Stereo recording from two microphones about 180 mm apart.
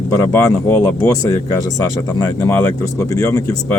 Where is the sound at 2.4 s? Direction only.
15° left (ahead or behind).